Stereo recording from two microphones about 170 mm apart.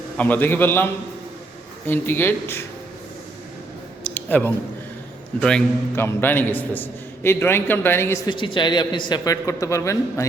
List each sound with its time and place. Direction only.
0.2 s a man's voice: 10° left (ahead or behind)
1.9 s a man's voice: 10° left (ahead or behind)
4.1 s a sound: 10° left (ahead or behind)
5.4 s a man's voice: 5° left (ahead or behind)
8.3 s a man's voice: 30° left (ahead or behind)